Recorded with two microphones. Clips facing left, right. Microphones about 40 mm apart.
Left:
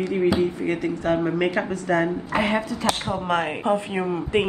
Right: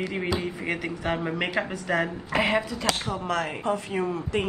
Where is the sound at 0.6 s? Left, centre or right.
Right.